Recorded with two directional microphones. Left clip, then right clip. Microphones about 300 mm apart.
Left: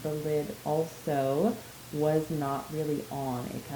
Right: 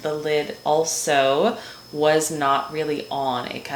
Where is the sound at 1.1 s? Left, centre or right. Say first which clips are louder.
Right 10 dB; centre.